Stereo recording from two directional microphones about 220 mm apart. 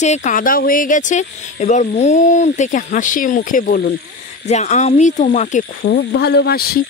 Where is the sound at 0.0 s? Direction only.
30° left (ahead or behind).